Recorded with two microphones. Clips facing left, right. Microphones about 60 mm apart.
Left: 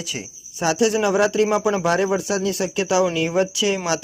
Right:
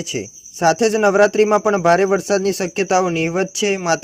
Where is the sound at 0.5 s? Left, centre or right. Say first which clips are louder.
Right 4 dB; right.